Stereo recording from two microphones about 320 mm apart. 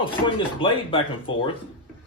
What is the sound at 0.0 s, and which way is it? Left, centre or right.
Speech, centre.